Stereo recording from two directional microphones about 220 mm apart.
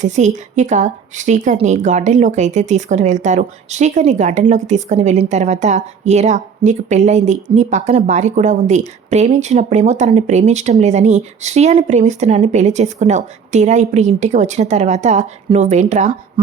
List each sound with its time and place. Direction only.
0.0 s a woman's voice: 30° right (ahead or behind)